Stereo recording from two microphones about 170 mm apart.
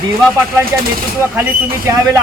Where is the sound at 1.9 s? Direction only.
15° right (ahead or behind).